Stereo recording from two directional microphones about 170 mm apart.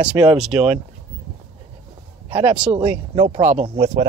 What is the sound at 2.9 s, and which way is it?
Speech, 40° right (ahead or behind).